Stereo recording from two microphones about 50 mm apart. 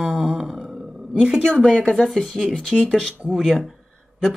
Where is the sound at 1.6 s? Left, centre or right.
Centre.